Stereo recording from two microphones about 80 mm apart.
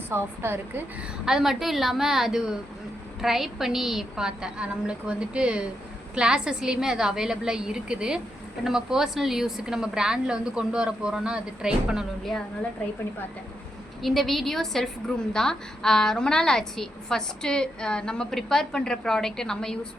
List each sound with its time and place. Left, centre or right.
0.1 s speech: right
1.2 s a woman's voice: centre
14.0 s a woman's voice: centre